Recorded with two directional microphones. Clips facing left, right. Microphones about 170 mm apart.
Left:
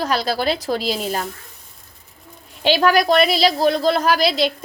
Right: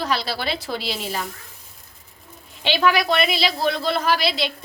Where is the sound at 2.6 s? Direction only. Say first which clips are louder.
Left 4 dB; 40° left (ahead or behind).